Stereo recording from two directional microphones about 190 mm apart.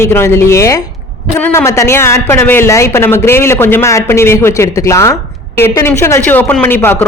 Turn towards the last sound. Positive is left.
turn(degrees=10)  # may be behind; listen again after turning